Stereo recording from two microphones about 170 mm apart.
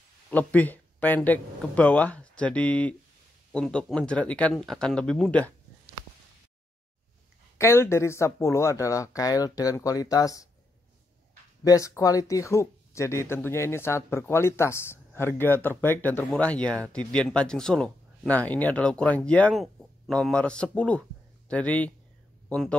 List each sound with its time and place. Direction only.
0.3 s speech: 10° left (ahead or behind)
7.5 s speech: 15° left (ahead or behind)
11.6 s speech: 20° left (ahead or behind)